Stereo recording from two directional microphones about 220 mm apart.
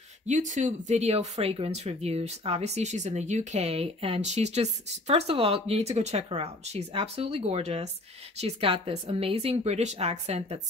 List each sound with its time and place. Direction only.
0.3 s speech: 35° right (ahead or behind)